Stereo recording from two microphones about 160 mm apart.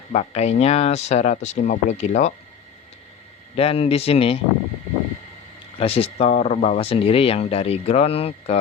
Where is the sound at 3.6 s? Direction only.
40° left (ahead or behind).